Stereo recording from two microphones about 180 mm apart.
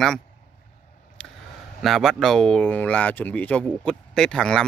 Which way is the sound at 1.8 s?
Centre (ahead or behind).